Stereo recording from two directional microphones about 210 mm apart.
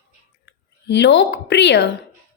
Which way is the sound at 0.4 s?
55° left (ahead or behind).